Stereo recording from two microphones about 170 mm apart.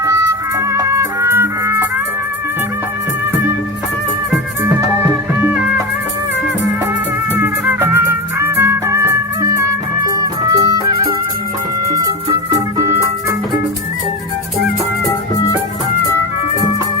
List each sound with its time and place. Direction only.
0.0 s music: 15° right (ahead or behind)
4.6 s music: 15° right (ahead or behind)
7.3 s music: 15° right (ahead or behind)
12.5 s music: 20° right (ahead or behind)